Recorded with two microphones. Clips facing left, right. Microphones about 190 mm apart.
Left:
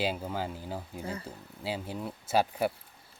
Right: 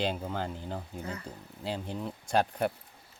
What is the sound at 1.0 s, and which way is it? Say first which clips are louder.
Speech: left 1 dB; 30° left (ahead or behind).